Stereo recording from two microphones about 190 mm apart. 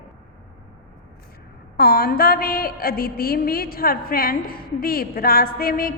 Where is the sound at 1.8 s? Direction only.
50° left (ahead or behind).